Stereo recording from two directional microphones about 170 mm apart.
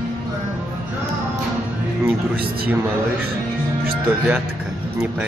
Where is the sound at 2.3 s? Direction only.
65° right (ahead or behind).